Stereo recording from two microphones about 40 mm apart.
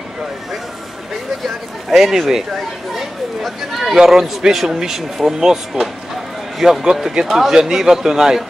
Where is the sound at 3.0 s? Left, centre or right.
Centre.